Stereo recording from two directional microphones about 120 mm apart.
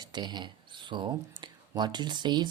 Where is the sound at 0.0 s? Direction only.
35° right (ahead or behind).